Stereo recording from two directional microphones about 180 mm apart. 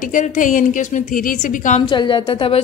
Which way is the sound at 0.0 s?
45° left (ahead or behind).